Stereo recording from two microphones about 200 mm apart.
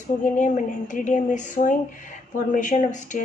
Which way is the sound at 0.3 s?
40° left (ahead or behind).